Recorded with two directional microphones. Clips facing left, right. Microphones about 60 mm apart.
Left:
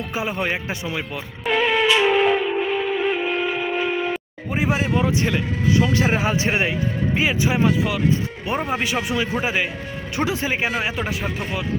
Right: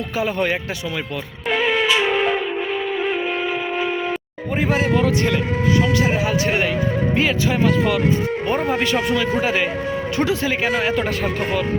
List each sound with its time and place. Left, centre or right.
1.5 s music: centre
4.5 s a man's voice: centre
4.9 s a man's voice: left
5.9 s a man's voice: left
7.2 s a man's voice: centre
8.7 s a man's voice: centre